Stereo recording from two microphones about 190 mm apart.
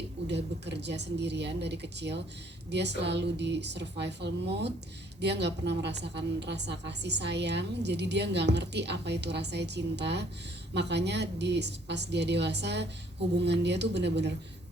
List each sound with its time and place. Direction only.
0.3 s a woman's voice: 65° right (ahead or behind)